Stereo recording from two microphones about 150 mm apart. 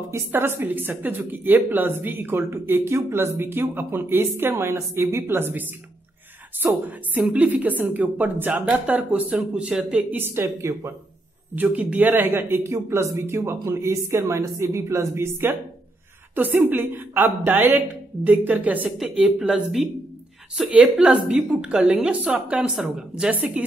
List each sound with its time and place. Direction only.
0.1 s a woman's voice: 15° right (ahead or behind)